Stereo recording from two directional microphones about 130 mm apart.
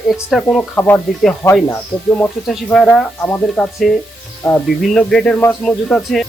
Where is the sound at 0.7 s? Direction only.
15° left (ahead or behind).